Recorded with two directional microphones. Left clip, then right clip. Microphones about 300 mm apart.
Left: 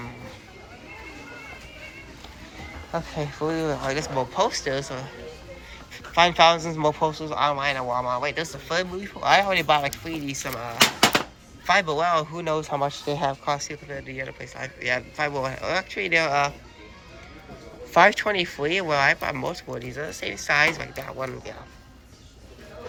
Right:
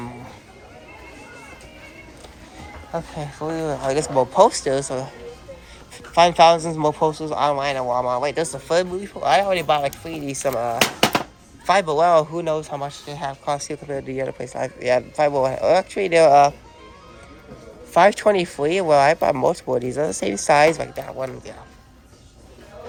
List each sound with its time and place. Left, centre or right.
2.9 s speech: centre
6.1 s speech: centre
17.9 s speech: centre
21.0 s speech: centre